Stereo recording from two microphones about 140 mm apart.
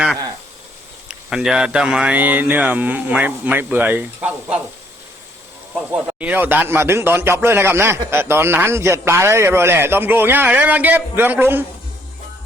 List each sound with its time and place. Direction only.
1.0 s a man's voice: 5° right (ahead or behind)
5.7 s a man's voice: 10° right (ahead or behind)